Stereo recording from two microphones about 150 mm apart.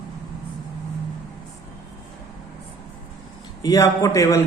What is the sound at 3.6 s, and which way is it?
Speech, 20° left (ahead or behind).